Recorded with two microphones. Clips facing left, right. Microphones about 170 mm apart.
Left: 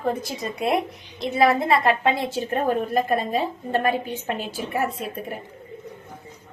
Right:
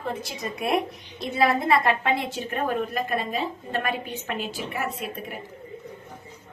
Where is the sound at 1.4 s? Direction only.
25° left (ahead or behind).